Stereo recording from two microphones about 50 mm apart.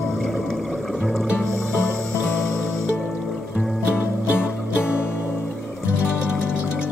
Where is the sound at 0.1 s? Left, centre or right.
Centre.